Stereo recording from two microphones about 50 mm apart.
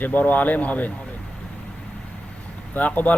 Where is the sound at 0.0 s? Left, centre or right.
Left.